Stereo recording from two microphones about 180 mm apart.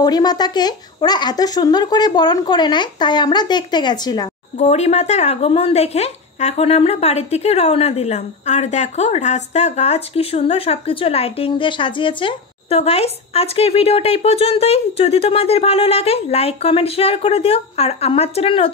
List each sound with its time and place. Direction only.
0.0 s speech: 20° left (ahead or behind)
4.6 s speech: 35° left (ahead or behind)